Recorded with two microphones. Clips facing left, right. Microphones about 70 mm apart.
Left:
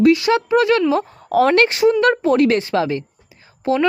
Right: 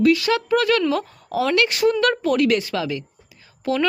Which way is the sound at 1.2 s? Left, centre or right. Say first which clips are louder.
Left 6 dB; left.